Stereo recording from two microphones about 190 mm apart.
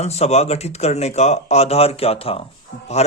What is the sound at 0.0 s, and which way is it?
Speech, 35° left (ahead or behind).